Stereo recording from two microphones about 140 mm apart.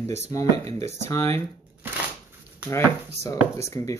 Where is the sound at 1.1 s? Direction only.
20° left (ahead or behind).